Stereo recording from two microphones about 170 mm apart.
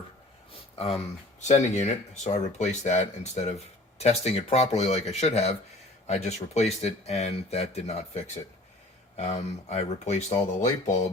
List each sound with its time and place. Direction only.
1.4 s speech: 45° left (ahead or behind)